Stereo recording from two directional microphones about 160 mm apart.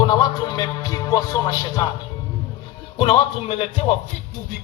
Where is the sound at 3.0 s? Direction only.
35° left (ahead or behind).